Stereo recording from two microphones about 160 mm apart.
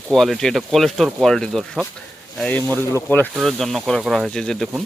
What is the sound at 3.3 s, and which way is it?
Speech, centre (ahead or behind).